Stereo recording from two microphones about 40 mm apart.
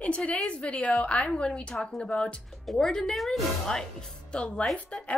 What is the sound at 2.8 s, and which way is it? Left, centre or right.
Speech, centre.